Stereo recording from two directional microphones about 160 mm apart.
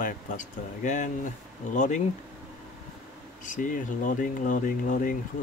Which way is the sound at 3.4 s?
55° left (ahead or behind).